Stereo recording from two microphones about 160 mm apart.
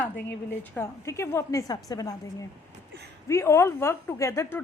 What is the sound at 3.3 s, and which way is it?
A woman's voice, 15° left (ahead or behind).